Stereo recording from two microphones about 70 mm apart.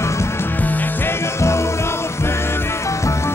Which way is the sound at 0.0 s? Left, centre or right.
Left.